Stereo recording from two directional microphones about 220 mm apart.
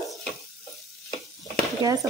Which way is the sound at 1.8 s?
15° right (ahead or behind).